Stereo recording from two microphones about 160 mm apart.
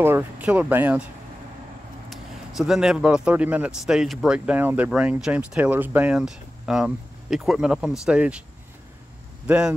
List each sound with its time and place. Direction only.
0.0 s speech: 10° right (ahead or behind)
2.0 s speech: centre (ahead or behind)
9.5 s speech: 5° right (ahead or behind)